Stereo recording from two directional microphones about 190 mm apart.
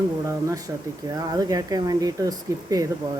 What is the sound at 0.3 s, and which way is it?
Speech, 15° right (ahead or behind).